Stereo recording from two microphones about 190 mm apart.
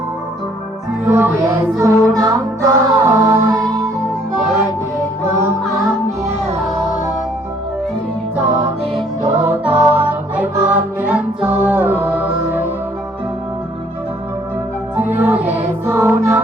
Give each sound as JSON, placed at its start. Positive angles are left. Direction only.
{"t": 1.0, "sound": "music", "side_deg": -10}
{"t": 4.0, "sound": "music", "side_deg": 0}
{"t": 5.6, "sound": "music", "side_deg": 0}
{"t": 9.5, "sound": "music", "side_deg": -5}
{"t": 14.9, "sound": "music", "side_deg": -10}